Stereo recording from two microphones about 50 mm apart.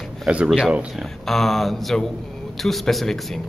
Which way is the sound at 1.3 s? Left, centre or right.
Centre.